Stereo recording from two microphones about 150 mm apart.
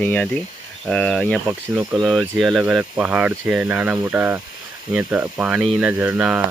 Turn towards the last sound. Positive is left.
turn(degrees=-10)  # may be behind; listen again after turning